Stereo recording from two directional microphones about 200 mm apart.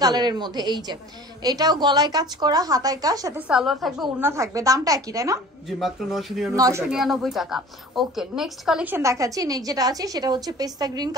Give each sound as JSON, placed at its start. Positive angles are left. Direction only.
{"t": 0.0, "sound": "a woman's voice", "side_deg": -20}
{"t": 3.3, "sound": "speech", "side_deg": -5}
{"t": 4.2, "sound": "a woman's voice", "side_deg": -15}
{"t": 5.7, "sound": "speech", "side_deg": 0}
{"t": 6.5, "sound": "a woman's voice", "side_deg": -15}
{"t": 6.9, "sound": "a woman's voice", "side_deg": 0}